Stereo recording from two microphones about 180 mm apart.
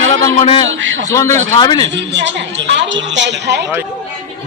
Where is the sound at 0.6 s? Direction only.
90° right.